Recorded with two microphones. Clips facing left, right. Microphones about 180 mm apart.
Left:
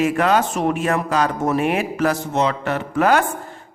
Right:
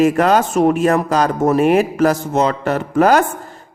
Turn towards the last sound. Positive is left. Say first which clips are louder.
# right 4 dB
turn(degrees=-40)  # may be behind; listen again after turning